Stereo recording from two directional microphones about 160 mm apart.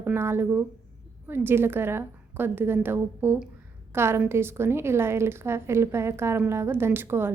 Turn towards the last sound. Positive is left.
turn(degrees=-15)  # may be behind; listen again after turning